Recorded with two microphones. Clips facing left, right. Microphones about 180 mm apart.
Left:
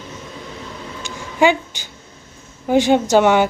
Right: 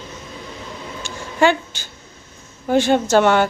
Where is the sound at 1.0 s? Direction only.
15° left (ahead or behind).